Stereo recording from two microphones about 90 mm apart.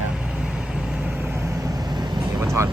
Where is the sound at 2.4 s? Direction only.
30° right (ahead or behind).